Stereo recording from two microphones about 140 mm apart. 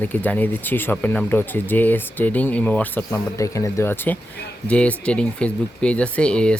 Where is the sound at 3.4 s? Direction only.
20° left (ahead or behind).